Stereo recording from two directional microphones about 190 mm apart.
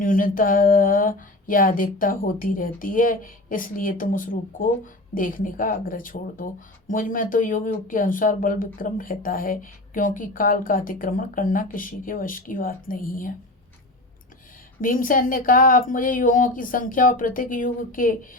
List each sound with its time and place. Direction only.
0.0 s speech: 45° left (ahead or behind)
14.8 s speech: 45° left (ahead or behind)